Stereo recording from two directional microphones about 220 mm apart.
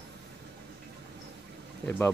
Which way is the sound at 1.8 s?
10° left (ahead or behind).